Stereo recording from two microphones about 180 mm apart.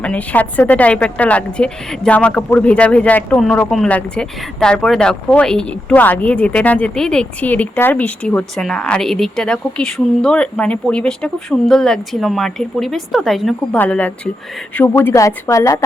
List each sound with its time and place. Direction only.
0.0 s speech: 5° left (ahead or behind)